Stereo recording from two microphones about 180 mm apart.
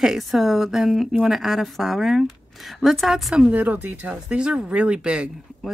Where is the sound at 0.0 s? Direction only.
Centre (ahead or behind).